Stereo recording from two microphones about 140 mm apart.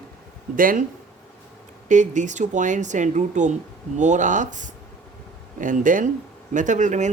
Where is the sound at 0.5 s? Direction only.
80° right.